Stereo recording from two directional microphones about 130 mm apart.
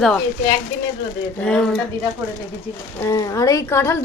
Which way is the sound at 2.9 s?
25° left (ahead or behind).